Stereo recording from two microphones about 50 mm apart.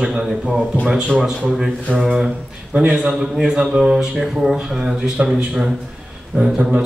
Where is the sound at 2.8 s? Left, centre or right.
Right.